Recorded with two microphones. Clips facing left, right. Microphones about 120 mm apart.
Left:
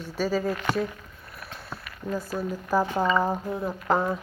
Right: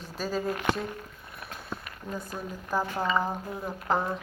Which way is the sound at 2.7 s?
20° left (ahead or behind).